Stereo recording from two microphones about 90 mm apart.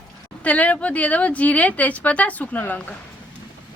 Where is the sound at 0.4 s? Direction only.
15° left (ahead or behind).